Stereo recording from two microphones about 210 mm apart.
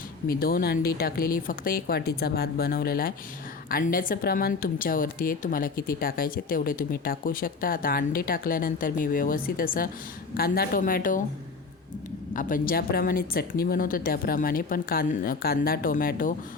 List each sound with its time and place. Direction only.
0.3 s speech: 45° left (ahead or behind)
12.3 s speech: 40° left (ahead or behind)